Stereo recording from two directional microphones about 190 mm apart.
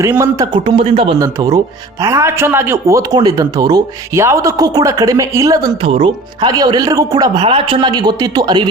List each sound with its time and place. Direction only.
0.0 s speech: 15° right (ahead or behind)